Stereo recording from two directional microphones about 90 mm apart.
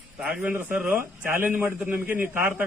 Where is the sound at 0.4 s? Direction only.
20° right (ahead or behind).